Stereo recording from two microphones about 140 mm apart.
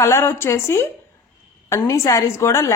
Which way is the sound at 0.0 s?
20° left (ahead or behind).